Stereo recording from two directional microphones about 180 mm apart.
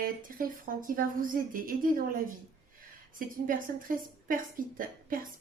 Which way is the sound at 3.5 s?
50° right (ahead or behind).